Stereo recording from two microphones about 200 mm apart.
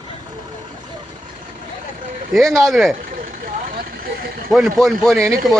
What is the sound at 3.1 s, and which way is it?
Vehicle, 45° right (ahead or behind).